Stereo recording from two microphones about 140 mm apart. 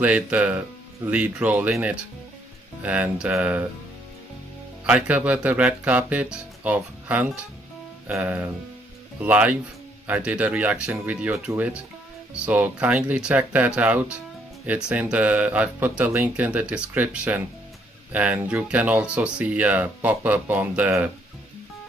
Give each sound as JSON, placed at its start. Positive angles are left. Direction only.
{"t": 0.0, "sound": "speech", "side_deg": -10}
{"t": 4.8, "sound": "speech", "side_deg": -10}